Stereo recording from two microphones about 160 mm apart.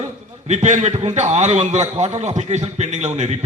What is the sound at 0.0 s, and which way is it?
A man's voice, 45° right (ahead or behind).